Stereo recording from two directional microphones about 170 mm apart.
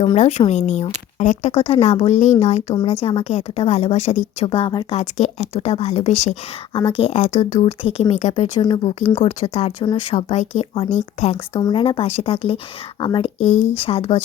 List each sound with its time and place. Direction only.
0.2 s speech: 40° left (ahead or behind)
4.9 s speech: 40° left (ahead or behind)
8.6 s speech: 25° left (ahead or behind)
10.2 s speech: 40° left (ahead or behind)
11.6 s speech: 30° left (ahead or behind)